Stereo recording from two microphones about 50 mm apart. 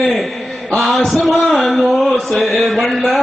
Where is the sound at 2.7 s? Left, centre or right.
Centre.